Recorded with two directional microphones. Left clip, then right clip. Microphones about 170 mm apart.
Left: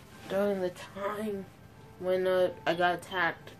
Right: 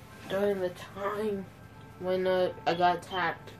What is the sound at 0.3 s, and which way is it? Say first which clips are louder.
Speech: right 1 dB; 55° left (ahead or behind).